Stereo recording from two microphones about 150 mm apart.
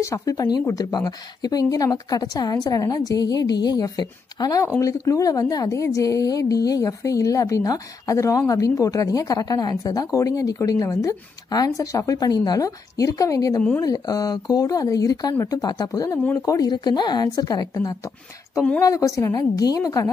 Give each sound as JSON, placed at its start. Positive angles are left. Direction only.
{"t": 0.0, "sound": "a woman's voice", "side_deg": 20}